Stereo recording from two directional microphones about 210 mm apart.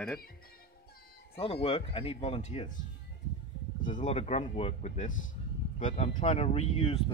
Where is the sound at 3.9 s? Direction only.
35° left (ahead or behind).